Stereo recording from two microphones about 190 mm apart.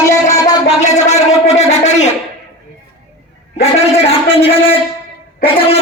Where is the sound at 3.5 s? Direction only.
35° left (ahead or behind).